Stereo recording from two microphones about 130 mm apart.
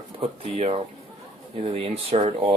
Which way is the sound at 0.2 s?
55° right (ahead or behind).